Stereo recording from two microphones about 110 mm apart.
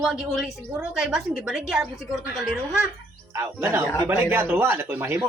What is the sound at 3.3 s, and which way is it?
Speech, 25° right (ahead or behind).